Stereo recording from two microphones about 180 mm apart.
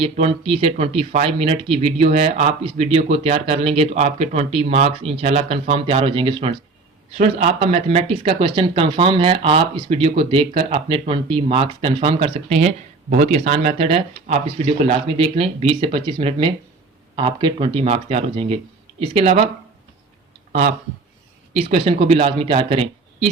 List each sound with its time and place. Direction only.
0.0 s speech: 30° right (ahead or behind)
7.1 s speech: 40° right (ahead or behind)
20.5 s speech: 40° right (ahead or behind)